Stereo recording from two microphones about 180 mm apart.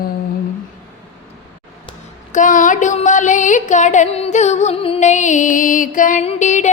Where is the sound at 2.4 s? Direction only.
45° left (ahead or behind).